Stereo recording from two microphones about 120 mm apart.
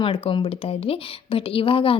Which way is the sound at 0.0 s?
45° left (ahead or behind).